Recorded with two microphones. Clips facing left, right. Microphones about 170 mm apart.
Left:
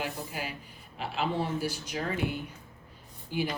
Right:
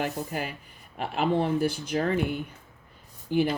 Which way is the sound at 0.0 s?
50° right (ahead or behind).